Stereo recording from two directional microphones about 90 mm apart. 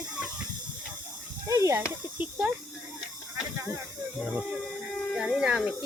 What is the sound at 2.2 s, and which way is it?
Snake, 15° right (ahead or behind).